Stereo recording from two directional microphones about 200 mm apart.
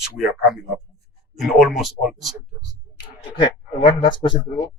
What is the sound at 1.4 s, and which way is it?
Speech, centre (ahead or behind).